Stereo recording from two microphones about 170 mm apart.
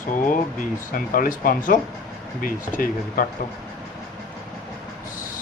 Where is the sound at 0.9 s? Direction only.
55° left (ahead or behind).